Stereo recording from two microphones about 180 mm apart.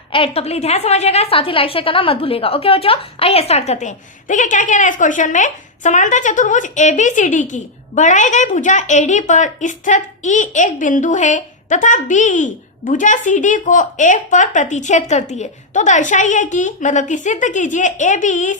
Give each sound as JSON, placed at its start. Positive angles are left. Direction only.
{"t": 0.1, "sound": "a woman's voice", "side_deg": 30}